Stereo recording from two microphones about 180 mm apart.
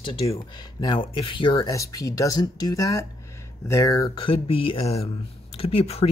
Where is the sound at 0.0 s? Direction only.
25° left (ahead or behind).